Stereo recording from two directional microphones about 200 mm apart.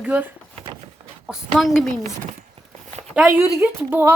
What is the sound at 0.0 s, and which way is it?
Speech, 10° right (ahead or behind).